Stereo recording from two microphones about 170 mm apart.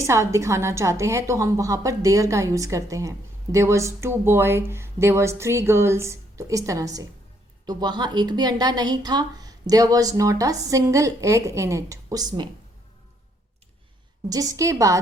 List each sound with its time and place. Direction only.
0.0 s a woman's voice: 15° right (ahead or behind)
14.3 s a woman's voice: 20° right (ahead or behind)